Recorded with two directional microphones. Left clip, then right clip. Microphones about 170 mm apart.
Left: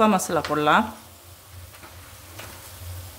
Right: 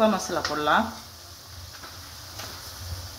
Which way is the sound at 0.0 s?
60° left (ahead or behind).